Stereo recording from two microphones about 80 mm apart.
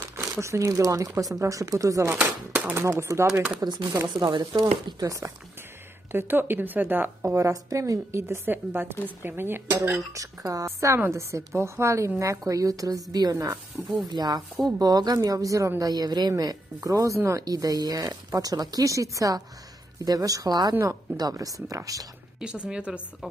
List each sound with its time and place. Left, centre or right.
0.1 s speech: right
2.1 s a woman's voice: centre
2.7 s a woman's voice: right
4.1 s speech: right
5.0 s speech: right
6.1 s a woman's voice: right
10.1 s a woman's voice: right
13.9 s speech: right
15.8 s speech: right
17.4 s speech: right
20.7 s a woman's voice: right
21.2 s speech: right
22.7 s speech: centre